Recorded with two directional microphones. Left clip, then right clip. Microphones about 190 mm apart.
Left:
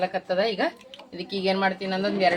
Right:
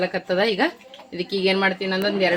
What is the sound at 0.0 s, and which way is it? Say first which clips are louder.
Speech: right 3 dB; 50° right (ahead or behind).